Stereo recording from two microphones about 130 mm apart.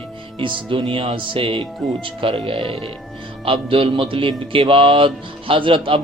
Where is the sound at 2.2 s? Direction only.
45° right (ahead or behind).